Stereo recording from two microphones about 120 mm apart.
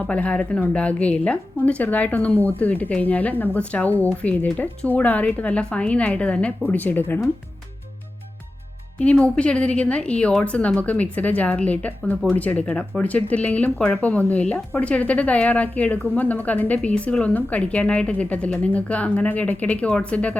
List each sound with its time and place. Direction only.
0.0 s speech: 10° left (ahead or behind)
9.0 s speech: 10° left (ahead or behind)